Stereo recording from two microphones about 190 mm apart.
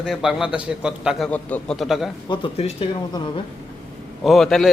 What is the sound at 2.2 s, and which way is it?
Speech, 25° left (ahead or behind).